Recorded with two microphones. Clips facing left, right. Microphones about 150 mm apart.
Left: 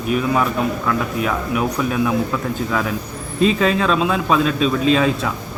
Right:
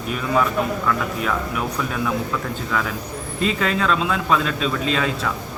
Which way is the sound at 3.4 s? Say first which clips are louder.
Left 5 dB; 20° left (ahead or behind).